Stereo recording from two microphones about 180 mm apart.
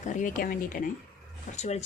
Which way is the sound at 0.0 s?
45° left (ahead or behind).